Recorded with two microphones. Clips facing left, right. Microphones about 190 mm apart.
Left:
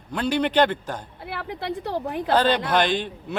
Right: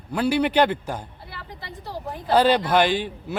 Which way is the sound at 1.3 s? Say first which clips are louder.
Left 14 dB; 65° left (ahead or behind).